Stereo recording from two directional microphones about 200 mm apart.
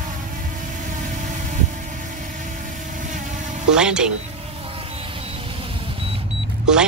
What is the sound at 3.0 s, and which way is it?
Vehicle, 40° right (ahead or behind).